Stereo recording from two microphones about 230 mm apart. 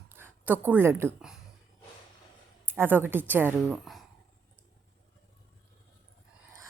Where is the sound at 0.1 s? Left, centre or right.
Centre.